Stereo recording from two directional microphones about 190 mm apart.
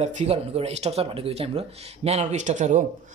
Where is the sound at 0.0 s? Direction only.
35° right (ahead or behind).